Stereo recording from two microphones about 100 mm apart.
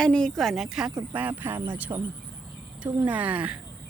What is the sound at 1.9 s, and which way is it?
Speech, 35° right (ahead or behind).